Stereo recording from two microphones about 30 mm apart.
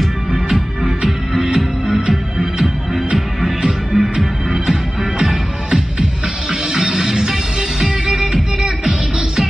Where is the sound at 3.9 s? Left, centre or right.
Right.